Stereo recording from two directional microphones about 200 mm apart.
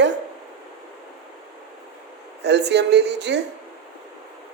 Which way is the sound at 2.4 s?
60° right (ahead or behind).